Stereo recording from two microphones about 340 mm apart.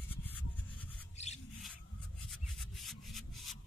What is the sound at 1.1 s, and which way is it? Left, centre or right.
Rub, centre.